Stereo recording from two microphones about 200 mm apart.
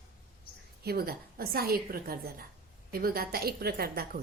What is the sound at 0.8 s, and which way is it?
A woman's voice, 50° right (ahead or behind).